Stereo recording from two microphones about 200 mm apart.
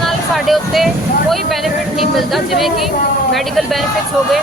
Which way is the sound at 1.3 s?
Centre (ahead or behind).